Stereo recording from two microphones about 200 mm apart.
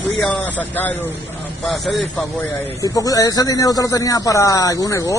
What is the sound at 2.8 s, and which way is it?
Speech, 15° left (ahead or behind).